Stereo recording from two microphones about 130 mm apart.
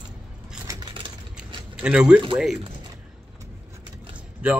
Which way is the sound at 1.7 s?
5° right (ahead or behind).